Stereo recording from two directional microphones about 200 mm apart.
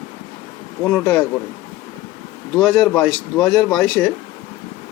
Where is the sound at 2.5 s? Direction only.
5° left (ahead or behind).